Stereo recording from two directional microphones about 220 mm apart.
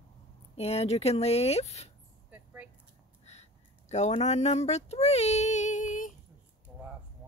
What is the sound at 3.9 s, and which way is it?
Speech, 30° left (ahead or behind).